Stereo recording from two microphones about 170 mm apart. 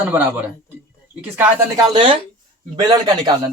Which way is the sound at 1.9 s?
30° right (ahead or behind).